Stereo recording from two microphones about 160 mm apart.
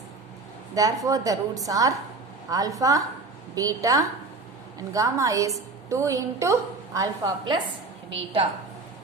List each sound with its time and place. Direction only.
0.7 s a woman's voice: 20° right (ahead or behind)
8.1 s a woman's voice: 35° right (ahead or behind)